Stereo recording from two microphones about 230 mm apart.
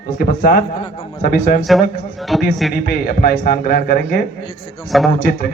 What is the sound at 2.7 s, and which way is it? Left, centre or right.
A man's voice, left.